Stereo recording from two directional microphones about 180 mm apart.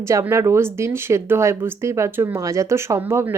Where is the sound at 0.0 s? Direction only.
15° right (ahead or behind).